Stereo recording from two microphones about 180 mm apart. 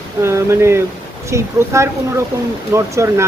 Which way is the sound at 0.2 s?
15° right (ahead or behind).